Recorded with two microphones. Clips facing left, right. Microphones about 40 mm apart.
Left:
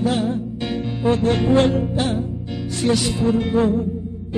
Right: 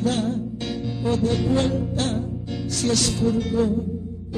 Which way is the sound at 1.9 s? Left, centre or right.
Centre.